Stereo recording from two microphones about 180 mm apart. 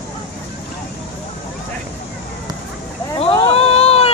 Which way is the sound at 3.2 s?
35° left (ahead or behind).